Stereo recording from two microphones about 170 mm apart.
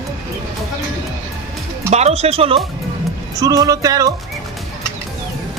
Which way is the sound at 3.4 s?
20° right (ahead or behind).